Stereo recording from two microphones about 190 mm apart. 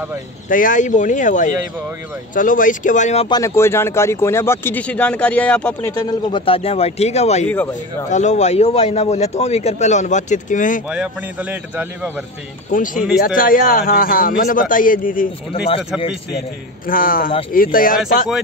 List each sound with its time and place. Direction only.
0.5 s a man's voice: 45° left (ahead or behind)
3.3 s speech: 15° left (ahead or behind); by 7.4 s 35° left (ahead or behind)
7.4 s speech: 10° left (ahead or behind)
8.1 s a man's voice: 40° left (ahead or behind)
10.9 s a man's voice: 5° right (ahead or behind)
12.7 s a man's voice: 45° left (ahead or behind)
16.8 s a man's voice: 50° left (ahead or behind)